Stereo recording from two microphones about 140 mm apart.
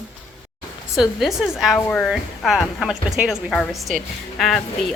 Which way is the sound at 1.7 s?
15° left (ahead or behind).